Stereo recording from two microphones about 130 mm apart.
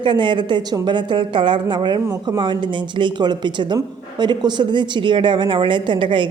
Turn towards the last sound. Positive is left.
turn(degrees=-40)  # may be behind; listen again after turning